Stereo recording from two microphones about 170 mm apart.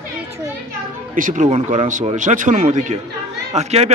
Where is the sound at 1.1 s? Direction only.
50° right (ahead or behind).